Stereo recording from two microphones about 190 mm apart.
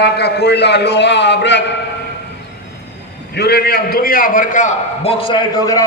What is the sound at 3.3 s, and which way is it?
A man's voice, 60° left (ahead or behind).